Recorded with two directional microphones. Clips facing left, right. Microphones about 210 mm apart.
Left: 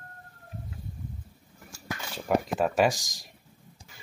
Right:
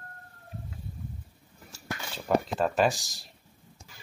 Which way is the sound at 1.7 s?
15° left (ahead or behind).